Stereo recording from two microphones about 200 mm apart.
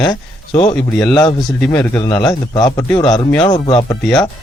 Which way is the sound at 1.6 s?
5° left (ahead or behind).